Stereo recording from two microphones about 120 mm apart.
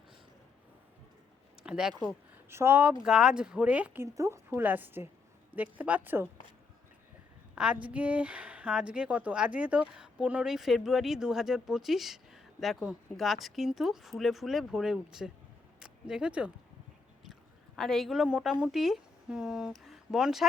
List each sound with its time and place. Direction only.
1.6 s speech: 5° right (ahead or behind)
2.5 s a woman's voice: 20° right (ahead or behind)
3.0 s speech: 5° right (ahead or behind)
4.0 s a woman's voice: 25° right (ahead or behind)
7.5 s a woman's voice: 10° right (ahead or behind)
17.7 s a woman's voice: 5° left (ahead or behind)